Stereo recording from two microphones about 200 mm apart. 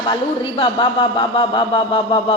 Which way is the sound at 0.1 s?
25° left (ahead or behind).